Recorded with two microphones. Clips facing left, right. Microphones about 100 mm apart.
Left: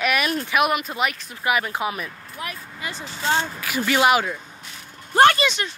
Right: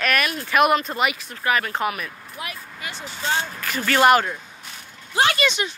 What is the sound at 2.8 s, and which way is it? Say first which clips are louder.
Vehicle: left 3 dB; 40° left (ahead or behind).